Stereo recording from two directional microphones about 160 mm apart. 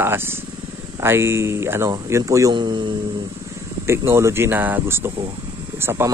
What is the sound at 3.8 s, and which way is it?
Speech, 15° right (ahead or behind).